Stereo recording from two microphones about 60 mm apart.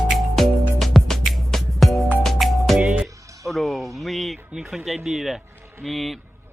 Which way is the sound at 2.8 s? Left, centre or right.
Centre.